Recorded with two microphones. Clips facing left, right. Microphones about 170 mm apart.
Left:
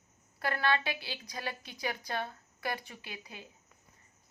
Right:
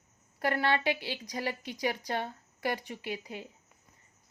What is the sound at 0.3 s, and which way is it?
A woman's voice, 30° right (ahead or behind).